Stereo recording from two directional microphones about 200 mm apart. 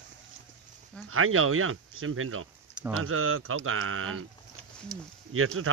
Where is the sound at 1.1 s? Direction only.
90° right.